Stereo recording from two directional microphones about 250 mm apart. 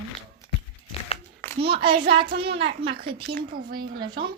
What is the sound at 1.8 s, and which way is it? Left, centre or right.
Child singing, right.